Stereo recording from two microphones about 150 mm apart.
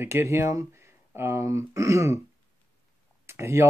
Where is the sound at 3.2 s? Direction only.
20° right (ahead or behind).